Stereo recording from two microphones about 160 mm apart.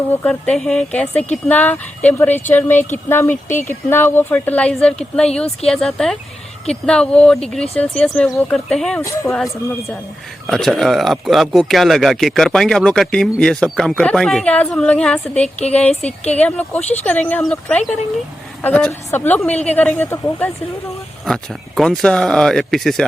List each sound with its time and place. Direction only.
0.1 s speech: 10° left (ahead or behind)
9.0 s speech: 20° left (ahead or behind)
10.4 s speech: centre (ahead or behind)
15.9 s speech: 40° left (ahead or behind)
16.3 s speech: 10° left (ahead or behind)